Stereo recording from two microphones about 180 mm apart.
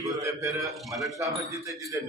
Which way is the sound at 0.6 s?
Centre (ahead or behind).